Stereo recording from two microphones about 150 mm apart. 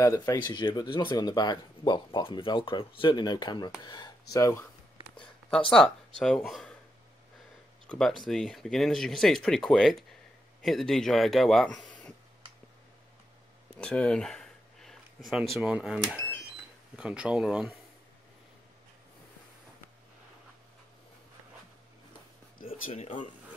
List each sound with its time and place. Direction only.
0.0 s speech: 25° left (ahead or behind)
5.7 s speech: 5° left (ahead or behind)
7.8 s a sound: 5° left (ahead or behind)
8.2 s speech: centre (ahead or behind)
13.7 s speech: 5° left (ahead or behind)